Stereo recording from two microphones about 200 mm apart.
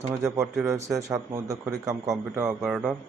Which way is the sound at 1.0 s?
15° right (ahead or behind).